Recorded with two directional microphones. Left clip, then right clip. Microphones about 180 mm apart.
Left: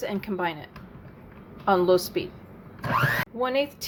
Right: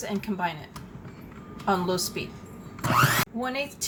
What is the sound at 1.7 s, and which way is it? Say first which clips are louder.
Speech: left 5 dB; 45° left (ahead or behind).